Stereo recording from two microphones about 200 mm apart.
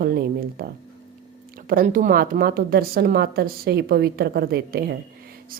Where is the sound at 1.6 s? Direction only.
45° right (ahead or behind).